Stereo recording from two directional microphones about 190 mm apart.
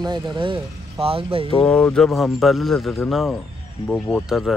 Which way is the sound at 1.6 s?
5° left (ahead or behind).